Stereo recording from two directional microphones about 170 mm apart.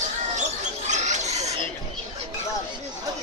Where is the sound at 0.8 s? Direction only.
45° right (ahead or behind).